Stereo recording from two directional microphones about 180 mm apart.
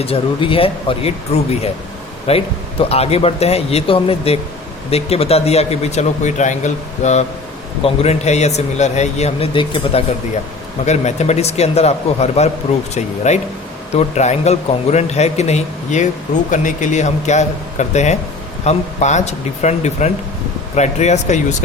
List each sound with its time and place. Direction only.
0.0 s speech: 30° left (ahead or behind)
10.8 s speech: 40° left (ahead or behind)